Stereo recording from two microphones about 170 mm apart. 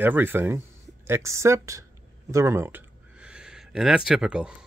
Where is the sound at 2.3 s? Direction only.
15° right (ahead or behind).